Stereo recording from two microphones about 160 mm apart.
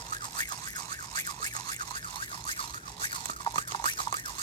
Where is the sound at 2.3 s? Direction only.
35° left (ahead or behind).